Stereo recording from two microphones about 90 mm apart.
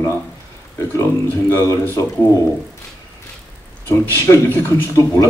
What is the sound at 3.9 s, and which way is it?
Speech, 25° left (ahead or behind).